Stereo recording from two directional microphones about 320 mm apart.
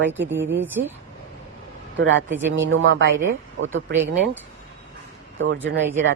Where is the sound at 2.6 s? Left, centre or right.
Right.